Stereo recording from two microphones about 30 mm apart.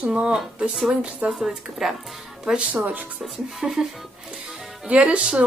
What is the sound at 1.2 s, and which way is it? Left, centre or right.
Speech, right.